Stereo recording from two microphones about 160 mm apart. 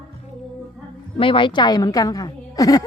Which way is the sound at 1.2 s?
30° left (ahead or behind).